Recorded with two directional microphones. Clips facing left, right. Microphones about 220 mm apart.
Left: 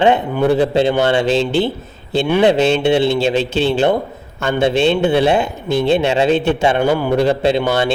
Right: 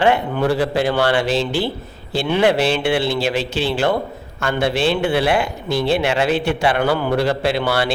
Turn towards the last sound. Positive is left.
turn(degrees=20)  # may be behind; listen again after turning